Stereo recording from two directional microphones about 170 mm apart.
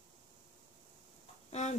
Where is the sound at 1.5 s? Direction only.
40° left (ahead or behind).